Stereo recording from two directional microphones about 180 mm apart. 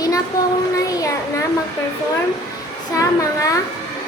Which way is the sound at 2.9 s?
15° left (ahead or behind).